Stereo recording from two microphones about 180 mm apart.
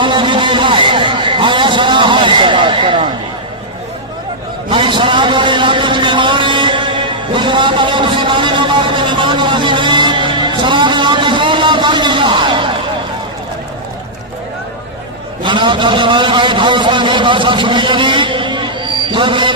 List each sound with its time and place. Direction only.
0.0 s a sound: 25° right (ahead or behind)
4.7 s vehicle: 25° right (ahead or behind)
15.4 s a man's voice: 25° right (ahead or behind)